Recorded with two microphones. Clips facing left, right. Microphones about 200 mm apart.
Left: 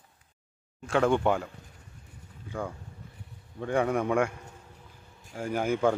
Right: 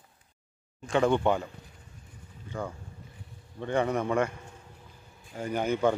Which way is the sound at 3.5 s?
5° left (ahead or behind).